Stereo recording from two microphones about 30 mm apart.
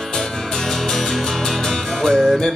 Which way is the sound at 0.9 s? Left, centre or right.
Centre.